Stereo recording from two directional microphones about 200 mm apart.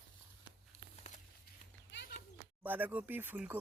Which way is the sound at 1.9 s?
65° left (ahead or behind).